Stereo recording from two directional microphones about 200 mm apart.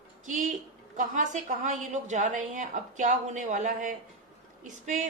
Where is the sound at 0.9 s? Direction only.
40° right (ahead or behind).